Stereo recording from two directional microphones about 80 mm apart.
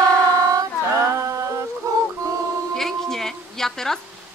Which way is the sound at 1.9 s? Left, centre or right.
Right.